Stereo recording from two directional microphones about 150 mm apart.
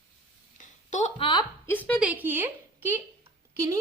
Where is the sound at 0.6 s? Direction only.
55° left (ahead or behind).